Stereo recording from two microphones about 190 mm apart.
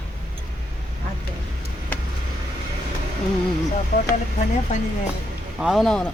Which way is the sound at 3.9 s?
55° left (ahead or behind).